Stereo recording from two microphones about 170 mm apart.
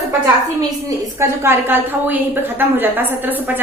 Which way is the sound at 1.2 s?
15° right (ahead or behind).